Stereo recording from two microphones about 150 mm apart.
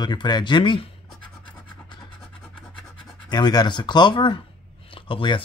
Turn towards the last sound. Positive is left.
turn(degrees=35)  # may be behind; listen again after turning